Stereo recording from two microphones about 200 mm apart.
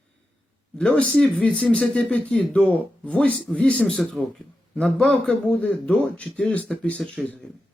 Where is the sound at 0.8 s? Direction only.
5° left (ahead or behind).